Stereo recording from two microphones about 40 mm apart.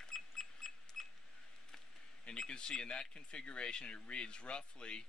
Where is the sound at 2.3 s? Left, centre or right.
Left.